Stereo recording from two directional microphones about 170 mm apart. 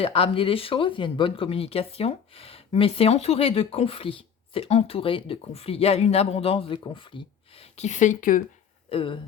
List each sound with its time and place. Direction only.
0.0 s speech: 35° left (ahead or behind); by 8.4 s 55° left (ahead or behind)
8.9 s speech: 30° left (ahead or behind)